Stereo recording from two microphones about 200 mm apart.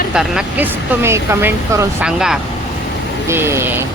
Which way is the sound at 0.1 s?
5° right (ahead or behind).